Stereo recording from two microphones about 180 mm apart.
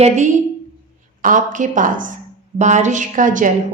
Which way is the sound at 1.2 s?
45° right (ahead or behind).